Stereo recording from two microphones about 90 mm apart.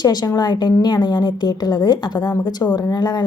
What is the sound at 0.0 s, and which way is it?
A woman's voice, 50° left (ahead or behind).